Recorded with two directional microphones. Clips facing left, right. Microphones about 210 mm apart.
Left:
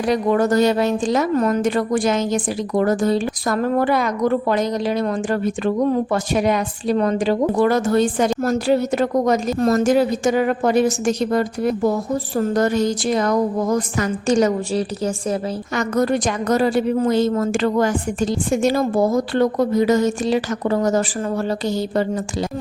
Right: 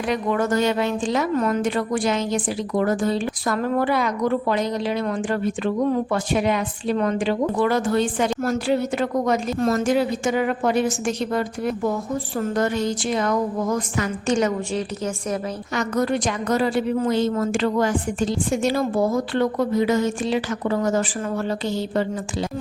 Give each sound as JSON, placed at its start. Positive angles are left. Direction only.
{"t": 0.0, "sound": "a woman's voice", "side_deg": 35}